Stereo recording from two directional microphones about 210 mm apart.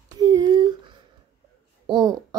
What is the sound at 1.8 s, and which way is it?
Babbling, 20° right (ahead or behind).